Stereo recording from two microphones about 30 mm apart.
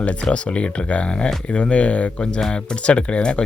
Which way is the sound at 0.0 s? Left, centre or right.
Left.